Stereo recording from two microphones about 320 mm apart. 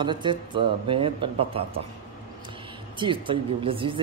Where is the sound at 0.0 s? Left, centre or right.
Centre.